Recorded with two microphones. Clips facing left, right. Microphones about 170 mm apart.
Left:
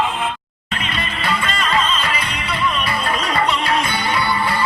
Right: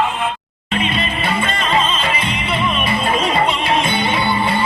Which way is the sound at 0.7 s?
25° right (ahead or behind).